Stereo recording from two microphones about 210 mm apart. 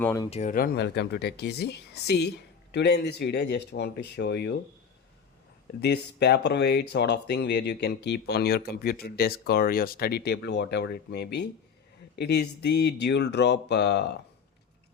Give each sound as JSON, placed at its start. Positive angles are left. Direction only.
{"t": 0.0, "sound": "speech", "side_deg": 15}
{"t": 0.3, "sound": "speech", "side_deg": 30}
{"t": 0.5, "sound": "speech", "side_deg": 45}
{"t": 5.8, "sound": "speech", "side_deg": 50}